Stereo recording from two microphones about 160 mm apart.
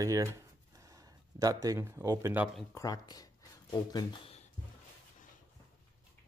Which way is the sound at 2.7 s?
25° left (ahead or behind).